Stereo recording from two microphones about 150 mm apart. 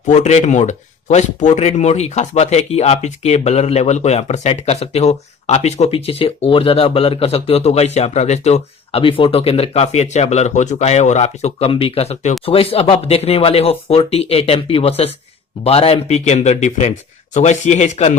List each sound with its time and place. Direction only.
0.1 s speech: 50° left (ahead or behind)